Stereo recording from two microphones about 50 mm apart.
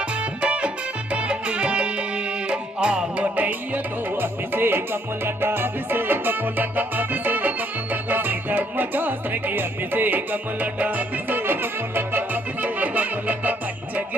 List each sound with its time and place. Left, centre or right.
0.2 s music: right
3.3 s music: right